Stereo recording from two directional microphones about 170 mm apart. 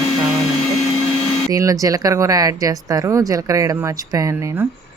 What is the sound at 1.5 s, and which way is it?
Speech, 20° right (ahead or behind).